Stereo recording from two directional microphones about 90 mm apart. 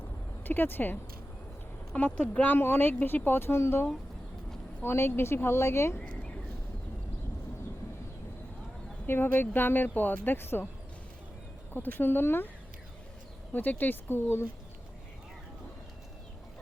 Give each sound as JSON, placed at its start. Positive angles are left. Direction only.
{"t": 0.4, "sound": "speech", "side_deg": 20}
{"t": 1.9, "sound": "speech", "side_deg": 10}
{"t": 6.0, "sound": "a sound", "side_deg": 10}
{"t": 9.0, "sound": "speech", "side_deg": 25}
{"t": 11.7, "sound": "speech", "side_deg": 20}
{"t": 13.5, "sound": "speech", "side_deg": 20}